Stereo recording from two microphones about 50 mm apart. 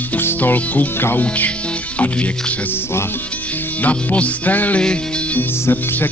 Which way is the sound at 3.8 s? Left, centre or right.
Left.